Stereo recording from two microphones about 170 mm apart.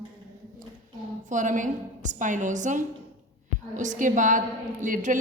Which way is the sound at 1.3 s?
50° right (ahead or behind).